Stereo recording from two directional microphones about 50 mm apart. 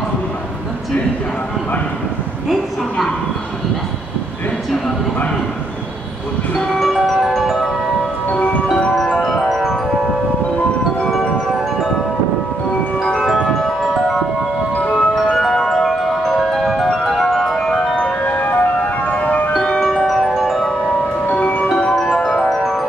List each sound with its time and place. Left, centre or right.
6.7 s ice cream truck: centre
8.3 s wind chime: left
9.2 s wind chime: centre
11.1 s wind chime: centre
13.0 s music: centre
14.8 s chime: left
15.3 s glockenspiel: centre
16.9 s marimba: centre
18.2 s ice cream truck: left
19.6 s chime: centre
20.2 s mallet percussion: centre
21.3 s mallet percussion: left
21.6 s glockenspiel: centre
22.5 s glockenspiel: centre